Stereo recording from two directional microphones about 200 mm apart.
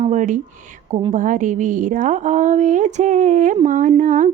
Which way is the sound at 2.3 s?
40° right (ahead or behind).